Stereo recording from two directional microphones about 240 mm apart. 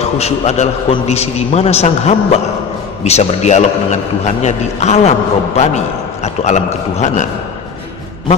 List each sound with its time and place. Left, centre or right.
0.0 s a man's voice: left
6.2 s a man's voice: left